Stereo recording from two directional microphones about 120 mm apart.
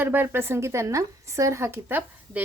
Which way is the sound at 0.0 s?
15° right (ahead or behind).